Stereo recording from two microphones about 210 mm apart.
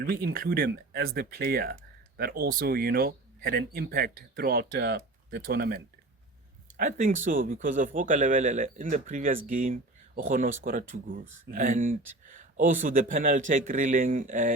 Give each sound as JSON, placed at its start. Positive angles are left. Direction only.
{"t": 0.0, "sound": "speech", "side_deg": -45}
{"t": 6.7, "sound": "speech", "side_deg": -35}